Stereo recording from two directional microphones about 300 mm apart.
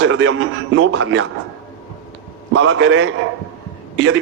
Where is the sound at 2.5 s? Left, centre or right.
Right.